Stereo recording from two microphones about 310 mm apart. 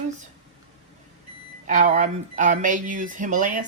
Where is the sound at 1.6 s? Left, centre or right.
Right.